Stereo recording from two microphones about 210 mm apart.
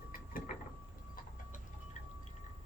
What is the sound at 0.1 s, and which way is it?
Mechanisms, 40° left (ahead or behind).